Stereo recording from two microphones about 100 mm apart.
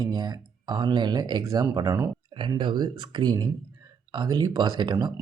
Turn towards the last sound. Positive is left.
turn(degrees=-45)  # may be behind; listen again after turning